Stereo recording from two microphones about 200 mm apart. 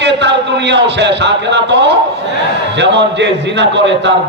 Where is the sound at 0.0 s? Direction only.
60° right (ahead or behind).